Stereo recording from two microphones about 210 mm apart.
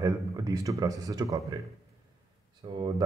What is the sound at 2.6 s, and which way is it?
Speech, 25° right (ahead or behind).